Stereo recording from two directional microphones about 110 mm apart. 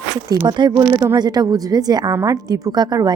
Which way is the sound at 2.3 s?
35° right (ahead or behind).